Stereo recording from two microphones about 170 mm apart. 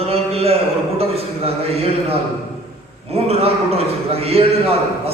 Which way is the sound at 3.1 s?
35° right (ahead or behind).